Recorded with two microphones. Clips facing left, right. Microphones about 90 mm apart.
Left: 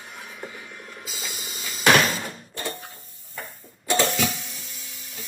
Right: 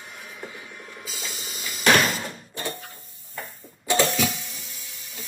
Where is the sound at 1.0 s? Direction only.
20° left (ahead or behind).